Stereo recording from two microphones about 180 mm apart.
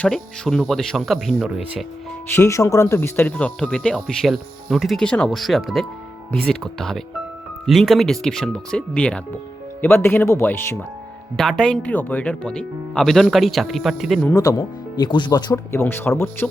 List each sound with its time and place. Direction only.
0.0 s speech: centre (ahead or behind)
2.3 s speech: 15° left (ahead or behind)
11.3 s speech: centre (ahead or behind)
14.3 s speech: 20° left (ahead or behind)